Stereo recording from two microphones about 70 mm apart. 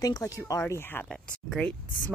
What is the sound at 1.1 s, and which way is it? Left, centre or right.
Speech, centre.